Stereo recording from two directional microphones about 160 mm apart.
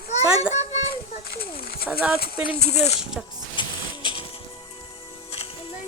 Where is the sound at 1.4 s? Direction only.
70° left (ahead or behind).